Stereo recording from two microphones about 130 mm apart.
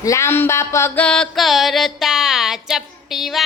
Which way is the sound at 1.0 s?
5° left (ahead or behind).